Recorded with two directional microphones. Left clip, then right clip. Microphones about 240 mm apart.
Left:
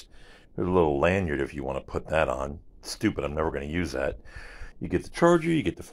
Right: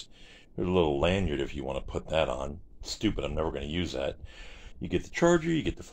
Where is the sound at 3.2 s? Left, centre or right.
Left.